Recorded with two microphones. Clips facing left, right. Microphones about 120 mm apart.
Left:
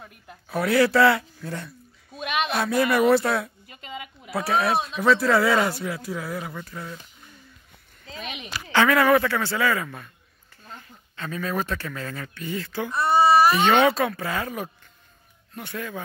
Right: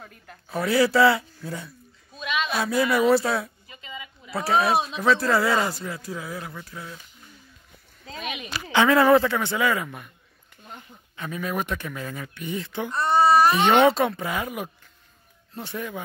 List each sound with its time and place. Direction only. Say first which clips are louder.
0.5 s speech: left 1 dB; centre (ahead or behind)
2.1 s a sound: left 1 dB; 60° left (ahead or behind)
2.5 s speech: left 1 dB; centre (ahead or behind)
3.6 s a sound: left 3 dB; 60° left (ahead or behind)
4.3 s speech: right 1 dB; centre (ahead or behind)
8.5 s speech: right 1 dB; 20° right (ahead or behind)
12.9 s a sound: left 1 dB; 5° left (ahead or behind)
13.7 s speech: right 1 dB; 25° right (ahead or behind)
15.5 s speech: right 1 dB; 25° right (ahead or behind)